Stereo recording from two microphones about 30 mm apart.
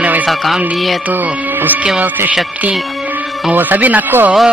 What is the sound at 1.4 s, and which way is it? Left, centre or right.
Music, right.